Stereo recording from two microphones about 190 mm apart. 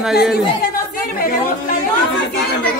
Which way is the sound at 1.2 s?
45° left (ahead or behind).